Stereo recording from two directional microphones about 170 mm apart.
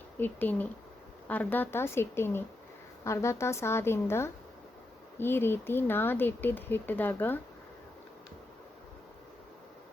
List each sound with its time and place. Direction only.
0.2 s speech: 10° left (ahead or behind)